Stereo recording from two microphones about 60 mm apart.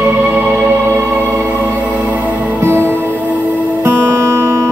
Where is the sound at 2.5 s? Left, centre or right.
Right.